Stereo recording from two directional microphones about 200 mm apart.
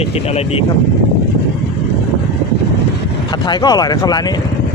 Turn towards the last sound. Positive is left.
turn(degrees=20)  # may be behind; listen again after turning